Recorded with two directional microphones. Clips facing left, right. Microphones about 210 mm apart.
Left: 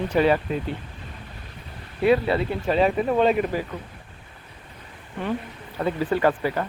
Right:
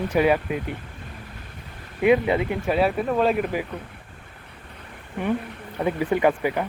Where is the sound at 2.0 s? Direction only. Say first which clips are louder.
Right 1 dB; 15° right (ahead or behind).